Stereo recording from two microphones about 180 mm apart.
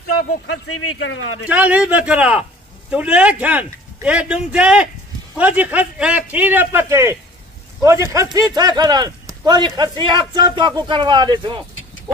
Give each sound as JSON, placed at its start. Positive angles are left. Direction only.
{"t": 0.5, "sound": "a man's voice", "side_deg": 90}
{"t": 1.5, "sound": "a man's voice", "side_deg": -10}